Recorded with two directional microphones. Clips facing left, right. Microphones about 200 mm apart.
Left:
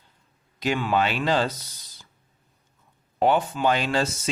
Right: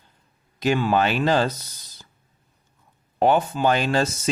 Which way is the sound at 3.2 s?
45° right (ahead or behind).